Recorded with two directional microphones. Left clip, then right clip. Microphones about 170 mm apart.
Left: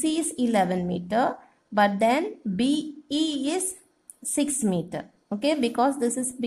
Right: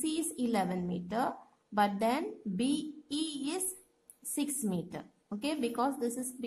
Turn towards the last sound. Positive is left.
turn(degrees=15)  # may be behind; listen again after turning